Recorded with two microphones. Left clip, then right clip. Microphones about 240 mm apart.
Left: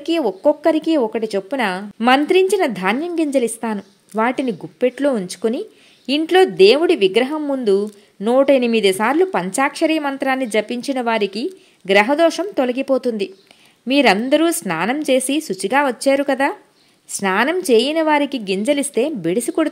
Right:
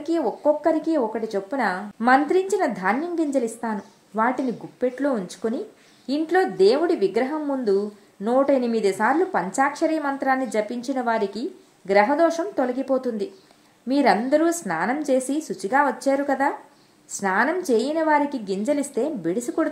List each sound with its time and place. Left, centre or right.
0.0 s a woman's voice: left